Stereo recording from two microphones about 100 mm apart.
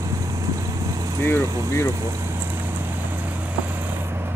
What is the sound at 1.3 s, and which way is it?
Speech, 25° left (ahead or behind).